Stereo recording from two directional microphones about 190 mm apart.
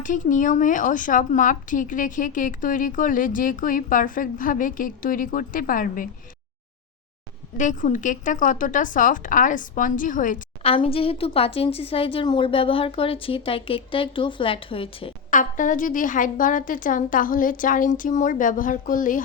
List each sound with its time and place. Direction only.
0.0 s speech: 40° left (ahead or behind)
7.5 s speech: 40° left (ahead or behind)
10.6 s a woman's voice: 30° left (ahead or behind)
15.3 s speech: 45° left (ahead or behind)